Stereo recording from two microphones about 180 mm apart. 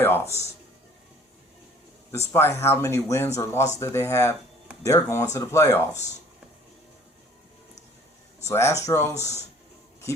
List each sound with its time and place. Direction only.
0.0 s speech: 10° left (ahead or behind)
2.3 s speech: 15° left (ahead or behind)
8.4 s speech: 15° left (ahead or behind)